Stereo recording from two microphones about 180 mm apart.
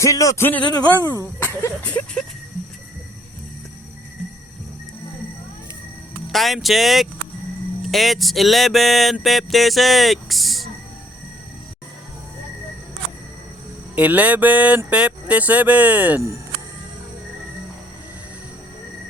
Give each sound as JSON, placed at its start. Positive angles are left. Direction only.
{"t": 0.0, "sound": "speech", "side_deg": 20}
{"t": 6.3, "sound": "music", "side_deg": 0}
{"t": 13.9, "sound": "a sound", "side_deg": -10}